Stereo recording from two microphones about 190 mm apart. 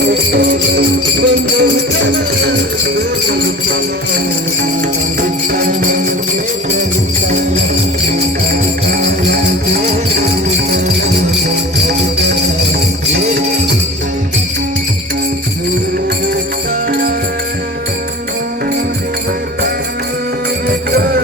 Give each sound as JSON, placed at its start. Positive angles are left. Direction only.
{"t": 0.3, "sound": "music", "side_deg": -60}
{"t": 5.2, "sound": "music", "side_deg": -45}
{"t": 9.2, "sound": "music", "side_deg": -55}